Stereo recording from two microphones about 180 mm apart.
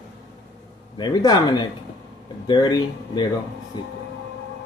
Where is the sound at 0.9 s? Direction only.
25° left (ahead or behind).